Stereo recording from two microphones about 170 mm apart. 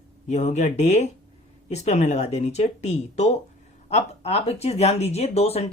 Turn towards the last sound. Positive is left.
turn(degrees=35)  # may be behind; listen again after turning